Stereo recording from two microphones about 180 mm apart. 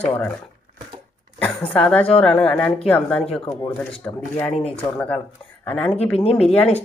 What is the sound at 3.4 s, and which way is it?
Speech, 30° left (ahead or behind).